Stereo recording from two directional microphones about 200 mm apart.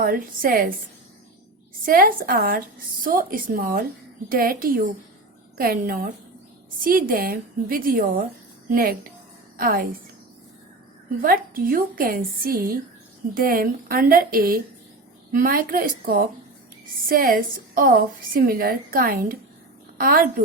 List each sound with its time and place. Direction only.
0.0 s a woman's voice: 45° right (ahead or behind)
1.8 s a woman's voice: 45° right (ahead or behind)
11.2 s a woman's voice: 45° right (ahead or behind)